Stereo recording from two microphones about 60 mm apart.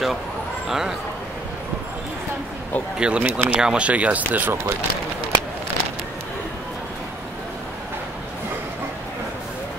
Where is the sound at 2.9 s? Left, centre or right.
Centre.